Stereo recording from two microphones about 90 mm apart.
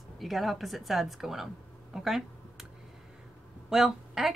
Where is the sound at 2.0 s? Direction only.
5° right (ahead or behind).